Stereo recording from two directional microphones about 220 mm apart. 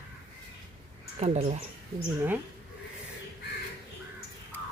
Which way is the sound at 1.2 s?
30° right (ahead or behind).